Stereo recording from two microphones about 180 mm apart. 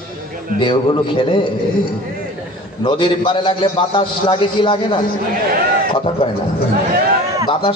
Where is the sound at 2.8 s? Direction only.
30° left (ahead or behind).